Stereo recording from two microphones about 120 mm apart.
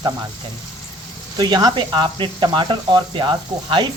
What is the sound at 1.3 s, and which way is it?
Speech, 35° right (ahead or behind).